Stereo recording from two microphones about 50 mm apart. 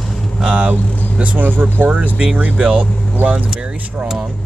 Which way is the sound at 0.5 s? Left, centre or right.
Right.